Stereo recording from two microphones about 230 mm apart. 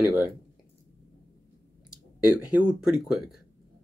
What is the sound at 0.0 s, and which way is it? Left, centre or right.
Speech, centre.